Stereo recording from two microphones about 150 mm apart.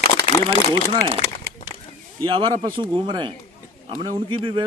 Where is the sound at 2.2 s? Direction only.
35° right (ahead or behind).